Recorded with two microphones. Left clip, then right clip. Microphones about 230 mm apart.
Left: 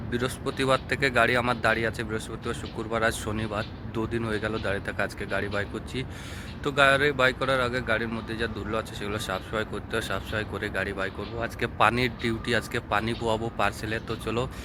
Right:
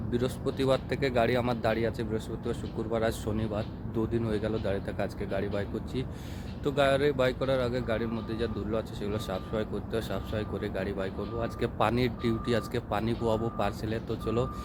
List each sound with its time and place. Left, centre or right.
0.1 s speech: centre